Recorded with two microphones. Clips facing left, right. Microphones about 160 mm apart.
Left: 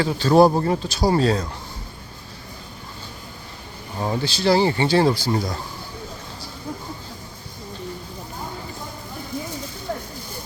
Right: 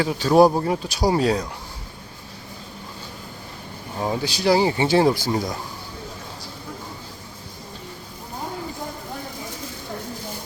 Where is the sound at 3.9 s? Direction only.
10° right (ahead or behind).